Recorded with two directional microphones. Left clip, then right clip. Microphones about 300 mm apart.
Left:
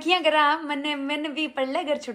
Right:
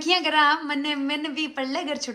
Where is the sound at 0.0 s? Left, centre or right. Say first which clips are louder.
Even; centre.